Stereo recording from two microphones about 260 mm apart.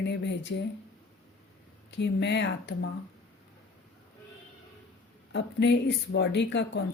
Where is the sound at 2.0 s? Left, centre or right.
Left.